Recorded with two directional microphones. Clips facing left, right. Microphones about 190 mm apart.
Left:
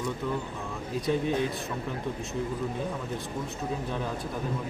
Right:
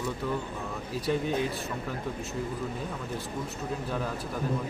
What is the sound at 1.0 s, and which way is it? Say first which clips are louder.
Speech: left 1 dB; 5° right (ahead or behind).